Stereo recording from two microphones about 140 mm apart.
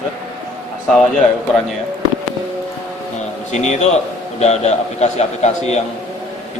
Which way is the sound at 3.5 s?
55° left (ahead or behind).